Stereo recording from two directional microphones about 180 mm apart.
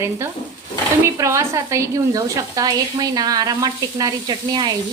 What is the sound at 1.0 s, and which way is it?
Speech, 15° right (ahead or behind).